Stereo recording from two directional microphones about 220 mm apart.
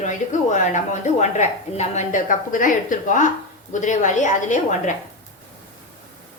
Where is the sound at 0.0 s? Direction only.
35° left (ahead or behind).